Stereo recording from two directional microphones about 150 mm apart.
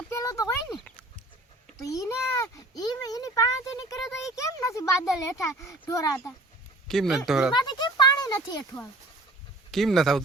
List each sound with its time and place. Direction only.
0.1 s a sound: 20° left (ahead or behind)
0.7 s dog: 5° left (ahead or behind)
1.8 s a child's voice: 20° left (ahead or behind)
6.8 s speech: centre (ahead or behind)
7.5 s a sound: 30° left (ahead or behind)
8.7 s a child's voice: 30° left (ahead or behind)
9.7 s speech: centre (ahead or behind)